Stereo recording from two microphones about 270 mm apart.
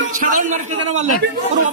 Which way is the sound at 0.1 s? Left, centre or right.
Right.